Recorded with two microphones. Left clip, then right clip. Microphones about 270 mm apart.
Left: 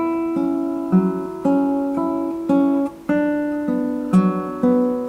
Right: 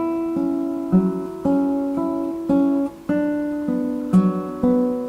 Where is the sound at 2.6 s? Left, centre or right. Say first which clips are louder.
Left 1 dB; left.